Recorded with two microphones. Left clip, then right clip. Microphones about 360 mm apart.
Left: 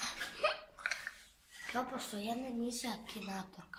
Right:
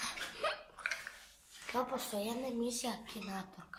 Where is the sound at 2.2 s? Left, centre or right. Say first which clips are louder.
Right 2 dB; centre.